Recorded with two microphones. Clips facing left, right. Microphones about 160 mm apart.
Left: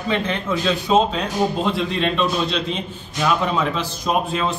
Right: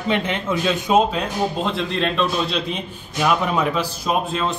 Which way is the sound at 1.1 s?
Centre (ahead or behind).